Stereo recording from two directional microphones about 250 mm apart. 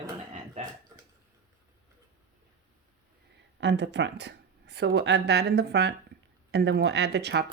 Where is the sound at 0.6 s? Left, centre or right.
Right.